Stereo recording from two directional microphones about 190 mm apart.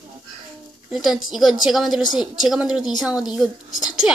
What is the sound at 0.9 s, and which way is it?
Speech, centre (ahead or behind).